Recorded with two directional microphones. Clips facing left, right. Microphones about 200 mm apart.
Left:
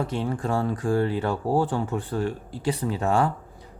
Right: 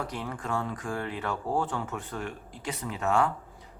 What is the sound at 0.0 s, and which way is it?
Speech, 25° left (ahead or behind).